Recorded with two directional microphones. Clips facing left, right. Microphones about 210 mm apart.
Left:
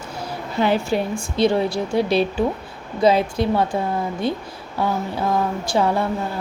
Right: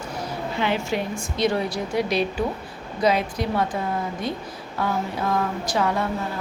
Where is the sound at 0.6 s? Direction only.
40° left (ahead or behind).